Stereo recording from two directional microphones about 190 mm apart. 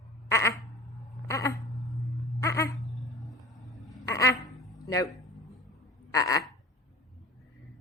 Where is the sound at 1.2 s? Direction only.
15° left (ahead or behind).